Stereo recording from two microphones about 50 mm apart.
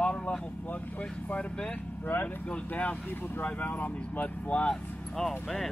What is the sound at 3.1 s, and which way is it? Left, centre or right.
Speech, left.